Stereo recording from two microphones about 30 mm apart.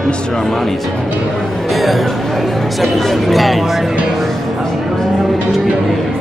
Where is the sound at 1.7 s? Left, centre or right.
Centre.